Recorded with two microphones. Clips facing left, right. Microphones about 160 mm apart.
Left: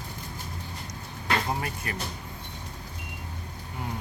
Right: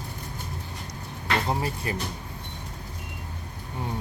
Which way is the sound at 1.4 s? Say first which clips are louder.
Right 3 dB; 25° right (ahead or behind).